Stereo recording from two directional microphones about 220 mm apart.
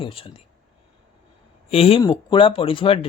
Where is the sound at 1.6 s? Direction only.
25° left (ahead or behind).